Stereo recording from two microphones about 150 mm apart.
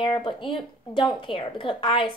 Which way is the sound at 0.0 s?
35° left (ahead or behind).